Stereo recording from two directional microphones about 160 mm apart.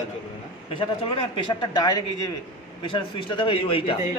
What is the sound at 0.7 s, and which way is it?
A man's voice, 30° left (ahead or behind).